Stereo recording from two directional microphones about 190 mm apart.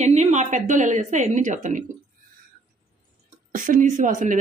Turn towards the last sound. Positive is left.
turn(degrees=-40)  # may be behind; listen again after turning